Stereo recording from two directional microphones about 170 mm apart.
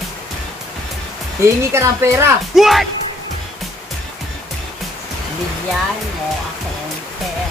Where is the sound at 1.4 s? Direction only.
15° right (ahead or behind).